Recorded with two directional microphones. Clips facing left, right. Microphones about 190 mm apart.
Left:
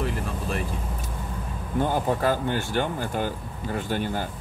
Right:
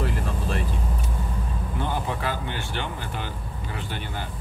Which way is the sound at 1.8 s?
45° left (ahead or behind).